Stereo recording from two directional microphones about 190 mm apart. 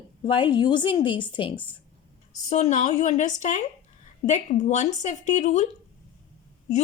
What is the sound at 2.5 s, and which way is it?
Speech, 40° left (ahead or behind).